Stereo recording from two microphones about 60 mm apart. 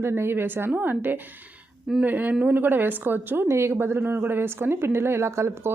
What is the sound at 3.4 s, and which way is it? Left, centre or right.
A woman's voice, right.